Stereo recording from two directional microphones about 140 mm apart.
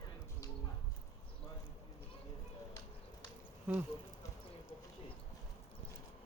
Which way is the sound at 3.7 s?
10° right (ahead or behind).